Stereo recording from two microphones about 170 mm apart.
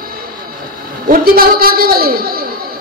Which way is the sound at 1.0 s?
55° right (ahead or behind).